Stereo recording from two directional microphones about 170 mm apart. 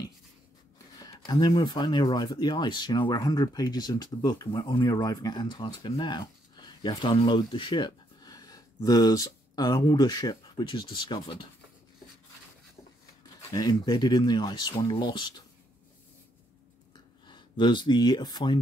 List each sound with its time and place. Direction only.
1.0 s speech: 25° left (ahead or behind)
13.2 s speech: 20° left (ahead or behind)
17.3 s speech: 25° left (ahead or behind)